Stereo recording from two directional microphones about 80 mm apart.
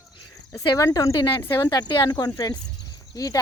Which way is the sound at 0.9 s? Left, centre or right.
Left.